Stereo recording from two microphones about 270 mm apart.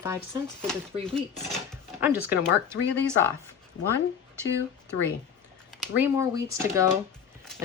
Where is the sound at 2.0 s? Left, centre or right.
Centre.